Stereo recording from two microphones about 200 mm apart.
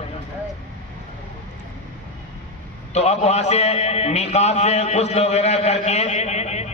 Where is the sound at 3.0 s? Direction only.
35° left (ahead or behind).